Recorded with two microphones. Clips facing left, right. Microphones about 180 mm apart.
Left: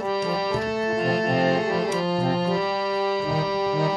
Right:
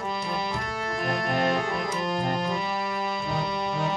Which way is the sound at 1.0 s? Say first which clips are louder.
Left 2 dB; 30° left (ahead or behind).